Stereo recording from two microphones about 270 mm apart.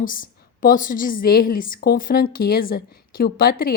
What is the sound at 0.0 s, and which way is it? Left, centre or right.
A woman's voice, left.